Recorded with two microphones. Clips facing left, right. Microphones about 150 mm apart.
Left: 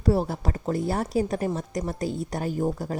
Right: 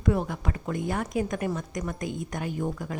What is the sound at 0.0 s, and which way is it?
Speech, 35° left (ahead or behind).